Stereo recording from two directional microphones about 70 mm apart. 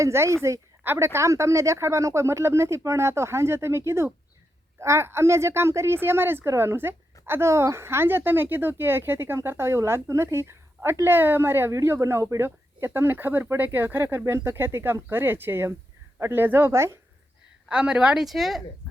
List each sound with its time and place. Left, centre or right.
0.0 s a woman's voice: right
17.7 s speech: centre